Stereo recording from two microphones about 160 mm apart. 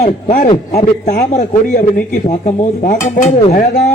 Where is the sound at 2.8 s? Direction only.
45° left (ahead or behind).